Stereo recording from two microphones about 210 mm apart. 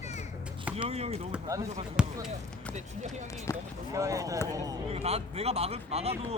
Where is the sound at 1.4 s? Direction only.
15° right (ahead or behind).